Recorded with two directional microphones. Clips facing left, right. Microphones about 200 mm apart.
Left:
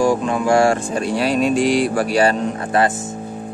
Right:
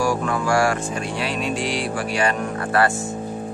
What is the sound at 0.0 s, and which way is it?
Music, 20° left (ahead or behind).